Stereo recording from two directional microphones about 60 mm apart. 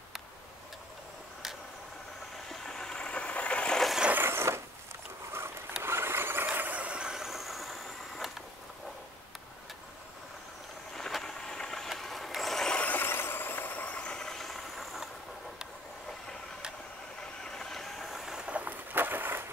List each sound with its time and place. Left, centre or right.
2.5 s vehicle: centre
4.1 s vehicle: right
5.8 s mechanisms: right; by 8.5 s centre
11.0 s vehicle: centre
12.7 s vehicle: left
13.0 s vehicle: left; by 15.0 s centre
17.4 s vehicle: centre; by 19.4 s right